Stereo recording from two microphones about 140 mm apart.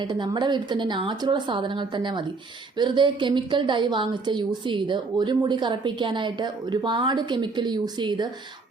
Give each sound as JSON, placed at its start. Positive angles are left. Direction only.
{"t": 0.0, "sound": "a woman's voice", "side_deg": -35}